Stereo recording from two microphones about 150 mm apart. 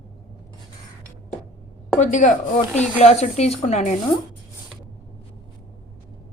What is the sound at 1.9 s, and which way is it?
Speech, 55° left (ahead or behind).